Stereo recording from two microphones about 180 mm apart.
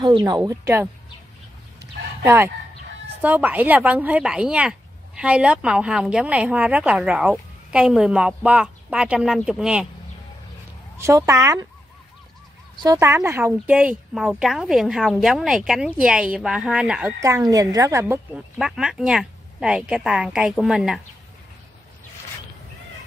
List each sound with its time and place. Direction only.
0.0 s a woman's voice: 25° right (ahead or behind)
2.2 s speech: 15° right (ahead or behind)
11.0 s speech: 15° right (ahead or behind)
12.8 s speech: 20° right (ahead or behind)
17.2 s speech: 20° right (ahead or behind)
18.3 s speech: 5° right (ahead or behind)